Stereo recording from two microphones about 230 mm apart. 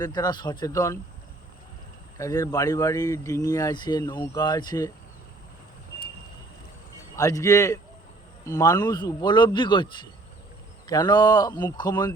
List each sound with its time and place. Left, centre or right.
0.0 s speech: centre
2.1 s speech: centre
7.2 s speech: centre